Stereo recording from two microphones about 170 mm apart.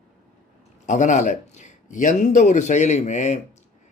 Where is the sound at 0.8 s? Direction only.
45° left (ahead or behind).